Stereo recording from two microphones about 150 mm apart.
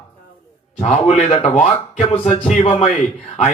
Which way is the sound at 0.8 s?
50° left (ahead or behind).